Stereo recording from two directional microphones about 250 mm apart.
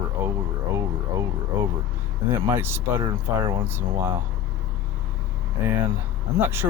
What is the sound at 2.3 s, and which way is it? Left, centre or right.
Speech, centre.